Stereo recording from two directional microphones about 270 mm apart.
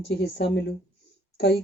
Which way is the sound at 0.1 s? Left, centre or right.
Left.